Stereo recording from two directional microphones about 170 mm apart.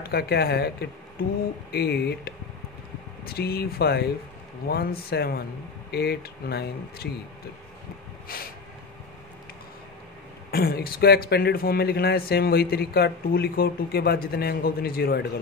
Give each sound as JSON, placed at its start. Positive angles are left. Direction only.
{"t": 0.0, "sound": "speech", "side_deg": 65}
{"t": 10.5, "sound": "speech", "side_deg": 65}